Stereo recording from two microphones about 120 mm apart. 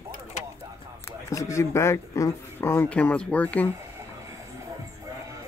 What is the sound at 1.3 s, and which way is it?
Speech, 25° left (ahead or behind).